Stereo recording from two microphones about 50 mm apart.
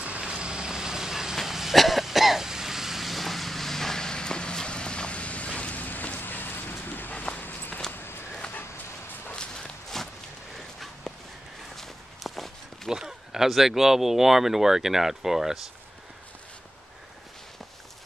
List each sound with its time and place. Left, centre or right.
0.0 s vehicle: right; by 7.2 s left
7.3 s walk: left
7.9 s a sound: left
9.3 s walk: centre
11.7 s walk: centre
12.9 s speech: centre